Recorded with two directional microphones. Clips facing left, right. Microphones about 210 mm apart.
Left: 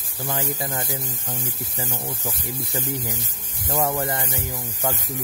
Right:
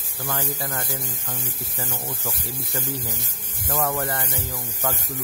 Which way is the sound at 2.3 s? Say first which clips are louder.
Left 2 dB; 15° left (ahead or behind).